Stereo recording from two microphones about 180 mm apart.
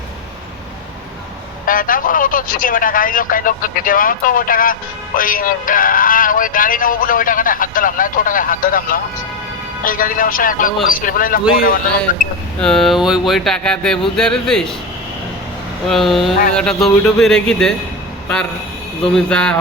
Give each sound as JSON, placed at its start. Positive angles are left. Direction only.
{"t": 1.6, "sound": "speech", "side_deg": 50}
{"t": 12.5, "sound": "speech", "side_deg": 5}
{"t": 15.9, "sound": "speech", "side_deg": 0}
{"t": 19.0, "sound": "speech", "side_deg": 5}